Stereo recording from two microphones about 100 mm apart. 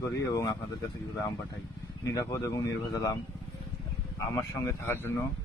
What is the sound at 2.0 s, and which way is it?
Speech, 30° left (ahead or behind).